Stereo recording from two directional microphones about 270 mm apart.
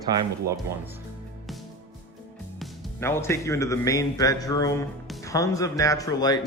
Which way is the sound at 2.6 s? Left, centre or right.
Centre.